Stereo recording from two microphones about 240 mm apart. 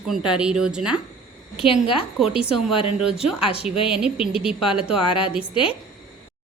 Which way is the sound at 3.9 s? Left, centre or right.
Centre.